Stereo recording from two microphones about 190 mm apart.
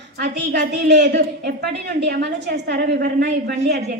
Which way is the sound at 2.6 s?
50° right (ahead or behind).